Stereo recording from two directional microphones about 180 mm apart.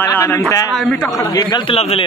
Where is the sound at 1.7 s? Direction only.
35° left (ahead or behind).